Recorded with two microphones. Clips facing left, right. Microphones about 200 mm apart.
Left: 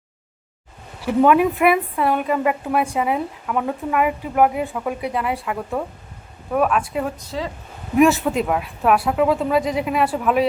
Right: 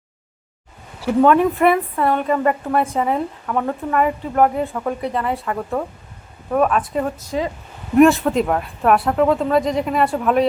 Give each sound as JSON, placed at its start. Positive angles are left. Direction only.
{"t": 1.2, "sound": "a woman's voice", "side_deg": 10}
{"t": 7.3, "sound": "speech", "side_deg": -20}
{"t": 7.9, "sound": "speech", "side_deg": 0}